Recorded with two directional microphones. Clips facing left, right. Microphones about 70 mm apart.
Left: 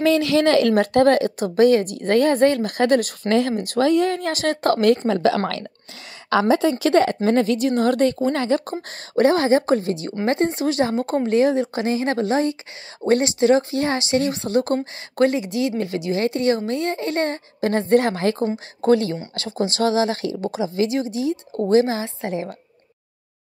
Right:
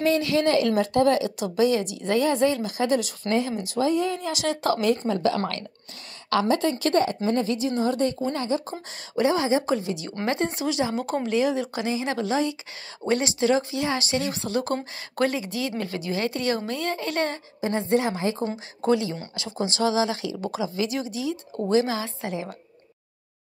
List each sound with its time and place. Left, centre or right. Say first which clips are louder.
0.0 s a woman's voice: left 5 dB; left
3.3 s speech: left 5 dB; left
3.5 s a woman's voice: left 5 dB; left
5.0 s a woman's voice: left 5 dB; left
6.9 s a woman's voice: left 5 dB; left
7.2 s a woman's voice: left 6 dB; left
17.6 s a woman's voice: left 6 dB; left
18.8 s speech: left 5 dB; left
19.5 s speech: left 5 dB; centre
19.8 s speech: left 3 dB; left